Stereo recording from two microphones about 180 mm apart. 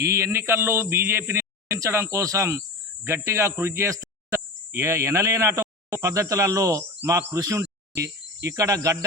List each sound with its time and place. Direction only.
0.0 s a man's voice: 15° right (ahead or behind)